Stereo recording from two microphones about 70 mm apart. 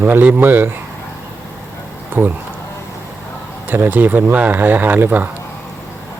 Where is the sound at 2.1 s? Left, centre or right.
Right.